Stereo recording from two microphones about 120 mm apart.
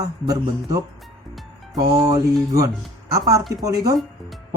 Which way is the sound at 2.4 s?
30° right (ahead or behind).